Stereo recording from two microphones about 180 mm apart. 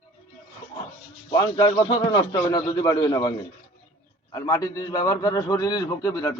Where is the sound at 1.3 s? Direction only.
20° left (ahead or behind).